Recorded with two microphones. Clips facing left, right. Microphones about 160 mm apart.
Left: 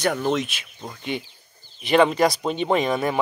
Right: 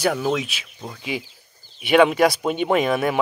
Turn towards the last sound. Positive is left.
turn(degrees=-5)  # may be behind; listen again after turning